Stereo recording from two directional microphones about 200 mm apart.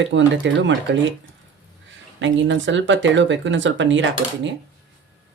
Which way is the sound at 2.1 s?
65° right (ahead or behind).